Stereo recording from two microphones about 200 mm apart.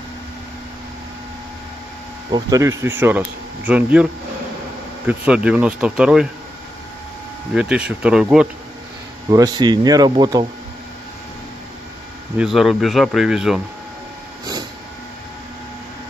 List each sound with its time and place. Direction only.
2.3 s speech: 15° right (ahead or behind)
7.5 s speech: 5° right (ahead or behind)
9.3 s speech: 20° right (ahead or behind)
12.4 s speech: centre (ahead or behind)